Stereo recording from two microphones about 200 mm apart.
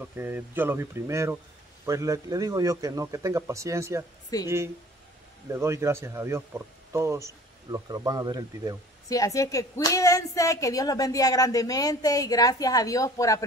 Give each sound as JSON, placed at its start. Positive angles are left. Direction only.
{"t": 0.0, "sound": "speech", "side_deg": -10}
{"t": 4.3, "sound": "speech", "side_deg": 20}
{"t": 5.5, "sound": "speech", "side_deg": -15}
{"t": 9.1, "sound": "speech", "side_deg": 15}